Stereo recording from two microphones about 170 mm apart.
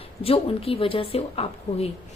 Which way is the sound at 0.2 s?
35° left (ahead or behind).